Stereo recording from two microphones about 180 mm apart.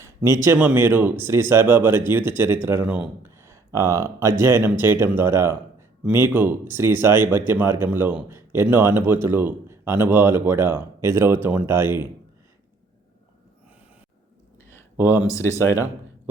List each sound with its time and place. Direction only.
0.4 s speech: 10° right (ahead or behind)
15.2 s speech: 20° left (ahead or behind)